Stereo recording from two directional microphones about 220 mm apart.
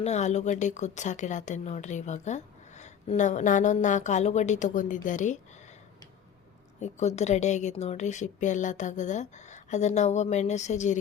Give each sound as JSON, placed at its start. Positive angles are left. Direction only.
{"t": 0.0, "sound": "speech", "side_deg": 30}
{"t": 6.7, "sound": "speech", "side_deg": 30}